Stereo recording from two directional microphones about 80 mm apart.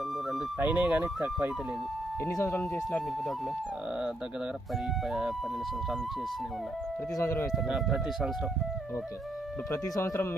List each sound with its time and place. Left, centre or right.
0.6 s speech: right
0.9 s speech: centre
2.2 s speech: left
5.0 s speech: centre
7.2 s speech: left
7.5 s speech: centre
9.7 s speech: left